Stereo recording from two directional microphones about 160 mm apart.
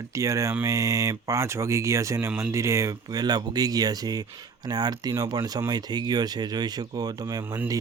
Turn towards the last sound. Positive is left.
turn(degrees=-10)  # may be behind; listen again after turning